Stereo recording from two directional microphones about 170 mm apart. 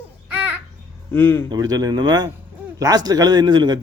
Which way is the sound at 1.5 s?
20° right (ahead or behind).